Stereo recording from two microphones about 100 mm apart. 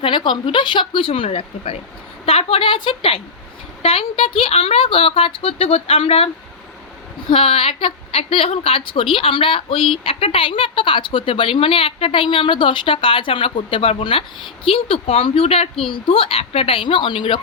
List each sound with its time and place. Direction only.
0.0 s a woman's voice: 55° left (ahead or behind); by 1.8 s 85° left
2.2 s speech: 75° left (ahead or behind)
7.3 s a woman's voice: 65° left (ahead or behind); by 15.7 s 80° left
15.8 s a woman's voice: 65° left (ahead or behind)